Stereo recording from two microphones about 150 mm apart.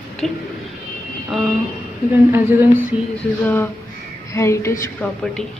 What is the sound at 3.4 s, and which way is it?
A woman's voice, 15° left (ahead or behind).